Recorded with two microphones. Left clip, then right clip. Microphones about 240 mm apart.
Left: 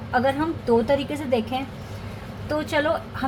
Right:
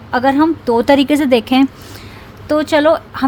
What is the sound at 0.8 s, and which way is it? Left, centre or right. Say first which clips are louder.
A woman's voice: right 12 dB; right.